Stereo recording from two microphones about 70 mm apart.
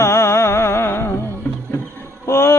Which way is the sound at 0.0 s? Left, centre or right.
Left.